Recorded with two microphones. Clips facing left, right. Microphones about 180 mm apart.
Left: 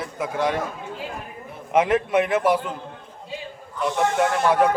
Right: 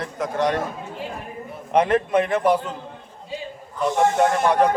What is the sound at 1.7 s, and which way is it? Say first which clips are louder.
A man's voice: right 1 dB; 5° left (ahead or behind).